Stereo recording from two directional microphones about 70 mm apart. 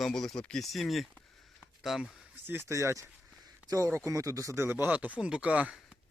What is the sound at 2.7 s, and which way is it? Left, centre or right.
Speech, right.